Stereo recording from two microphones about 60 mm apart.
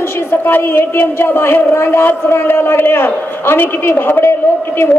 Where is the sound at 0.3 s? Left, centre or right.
Left.